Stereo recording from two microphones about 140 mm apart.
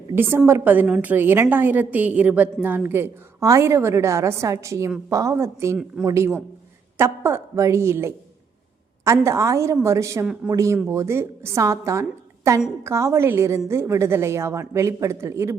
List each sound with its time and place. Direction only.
0.1 s a woman's voice: 15° right (ahead or behind)